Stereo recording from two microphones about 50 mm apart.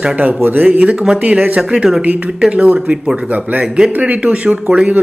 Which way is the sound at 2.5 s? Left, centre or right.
Right.